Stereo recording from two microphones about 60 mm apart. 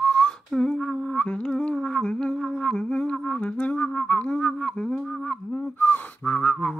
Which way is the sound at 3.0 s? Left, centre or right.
Centre.